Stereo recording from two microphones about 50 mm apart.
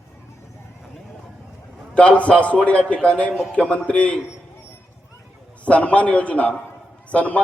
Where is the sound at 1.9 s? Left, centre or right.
Left.